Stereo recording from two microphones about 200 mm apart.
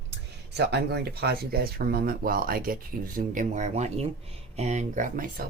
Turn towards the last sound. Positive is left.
turn(degrees=-45)  # may be behind; listen again after turning